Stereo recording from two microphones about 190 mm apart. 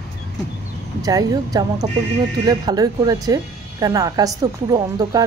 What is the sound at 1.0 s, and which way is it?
Speech, 20° right (ahead or behind).